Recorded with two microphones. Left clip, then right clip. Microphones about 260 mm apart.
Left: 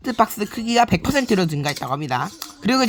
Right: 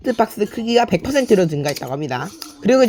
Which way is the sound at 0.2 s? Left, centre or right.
Centre.